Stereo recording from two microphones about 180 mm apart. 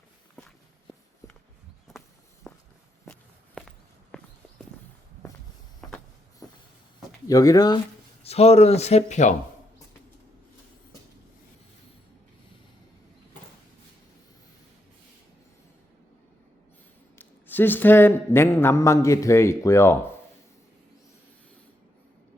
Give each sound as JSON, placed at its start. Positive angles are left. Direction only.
{"t": 1.9, "sound": "walk", "side_deg": 0}
{"t": 7.3, "sound": "speech", "side_deg": 20}
{"t": 8.2, "sound": "speech", "side_deg": 35}
{"t": 17.2, "sound": "speech", "side_deg": 10}